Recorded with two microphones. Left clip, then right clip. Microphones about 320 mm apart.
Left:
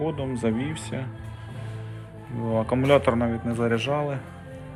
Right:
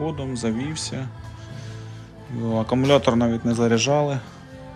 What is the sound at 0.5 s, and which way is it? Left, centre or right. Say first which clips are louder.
Speech: right 2 dB; right.